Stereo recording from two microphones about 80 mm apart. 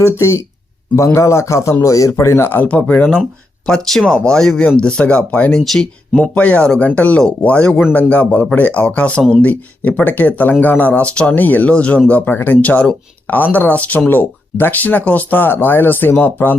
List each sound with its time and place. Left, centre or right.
0.0 s a man's voice: left